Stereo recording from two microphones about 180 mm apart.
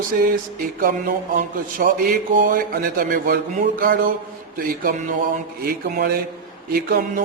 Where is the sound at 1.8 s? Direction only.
55° right (ahead or behind).